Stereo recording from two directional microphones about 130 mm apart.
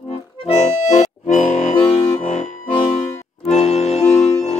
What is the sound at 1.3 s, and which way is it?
Accordion, 75° left (ahead or behind).